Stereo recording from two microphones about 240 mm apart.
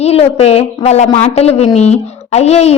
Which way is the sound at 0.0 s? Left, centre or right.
Left.